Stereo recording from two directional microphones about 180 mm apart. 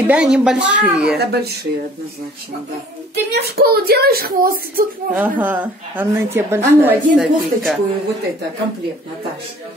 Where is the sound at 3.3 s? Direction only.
60° right (ahead or behind).